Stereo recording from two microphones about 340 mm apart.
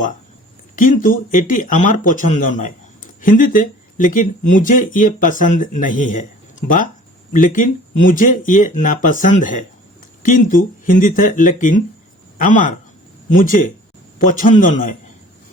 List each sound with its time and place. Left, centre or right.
0.8 s speech: left